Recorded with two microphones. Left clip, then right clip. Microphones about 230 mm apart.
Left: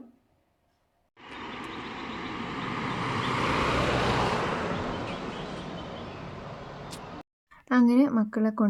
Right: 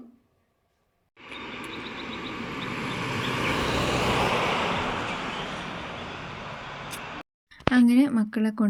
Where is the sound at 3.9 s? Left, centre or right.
Right.